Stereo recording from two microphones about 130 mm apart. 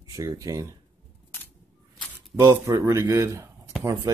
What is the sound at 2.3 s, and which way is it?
Speech, 20° right (ahead or behind).